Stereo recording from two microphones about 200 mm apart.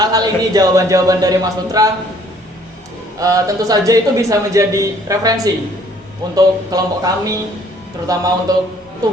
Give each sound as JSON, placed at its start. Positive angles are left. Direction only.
{"t": 0.0, "sound": "a man's voice", "side_deg": -20}
{"t": 3.2, "sound": "a man's voice", "side_deg": -15}